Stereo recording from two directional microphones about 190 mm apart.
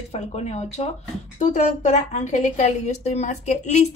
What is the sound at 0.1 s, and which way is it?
A woman's voice, 35° left (ahead or behind).